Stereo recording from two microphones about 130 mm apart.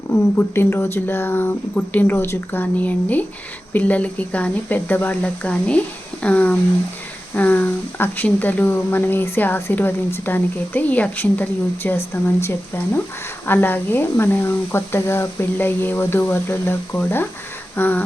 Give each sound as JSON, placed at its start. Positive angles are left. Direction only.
{"t": 0.1, "sound": "speech", "side_deg": 15}